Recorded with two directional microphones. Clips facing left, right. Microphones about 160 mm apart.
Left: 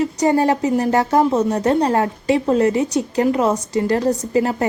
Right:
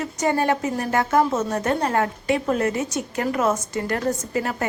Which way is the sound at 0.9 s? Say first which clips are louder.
Left 4 dB; 30° left (ahead or behind).